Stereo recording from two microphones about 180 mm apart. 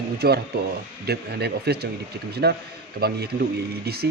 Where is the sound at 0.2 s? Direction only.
60° right (ahead or behind).